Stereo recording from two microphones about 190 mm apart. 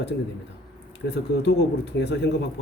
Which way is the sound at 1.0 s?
65° left (ahead or behind).